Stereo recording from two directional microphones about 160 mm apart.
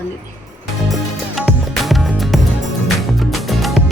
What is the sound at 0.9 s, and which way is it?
Music, centre (ahead or behind).